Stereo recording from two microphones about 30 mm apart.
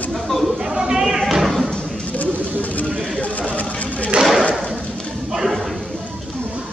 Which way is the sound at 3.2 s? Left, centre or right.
Left.